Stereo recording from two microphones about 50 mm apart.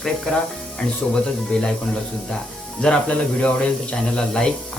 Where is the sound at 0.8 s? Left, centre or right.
Centre.